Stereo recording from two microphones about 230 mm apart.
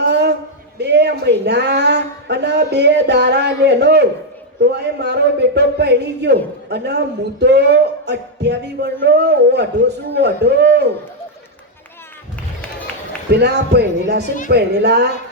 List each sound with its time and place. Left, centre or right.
0.1 s a sound: right
0.8 s speech: right
13.3 s speech: right